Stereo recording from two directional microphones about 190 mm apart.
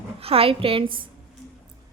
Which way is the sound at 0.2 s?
30° right (ahead or behind).